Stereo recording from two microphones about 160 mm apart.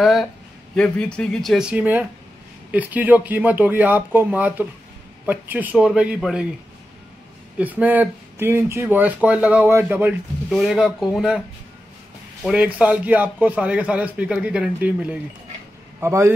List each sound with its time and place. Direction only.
0.0 s a man's voice: centre (ahead or behind)
7.5 s a man's voice: 10° right (ahead or behind)
10.5 s speech: centre (ahead or behind)
12.4 s a man's voice: 10° right (ahead or behind)